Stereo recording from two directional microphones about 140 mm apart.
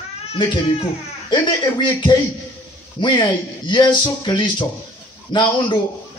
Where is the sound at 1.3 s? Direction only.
35° left (ahead or behind).